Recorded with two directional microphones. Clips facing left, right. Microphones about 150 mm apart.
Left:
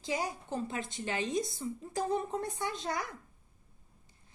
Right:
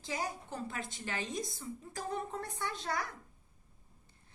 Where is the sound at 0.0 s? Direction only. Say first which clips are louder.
Left 4 dB; 20° left (ahead or behind).